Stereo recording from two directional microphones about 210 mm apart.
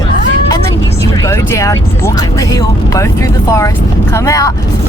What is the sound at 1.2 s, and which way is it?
Speech, 15° left (ahead or behind).